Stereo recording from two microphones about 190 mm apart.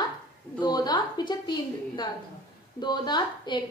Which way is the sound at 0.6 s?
20° left (ahead or behind).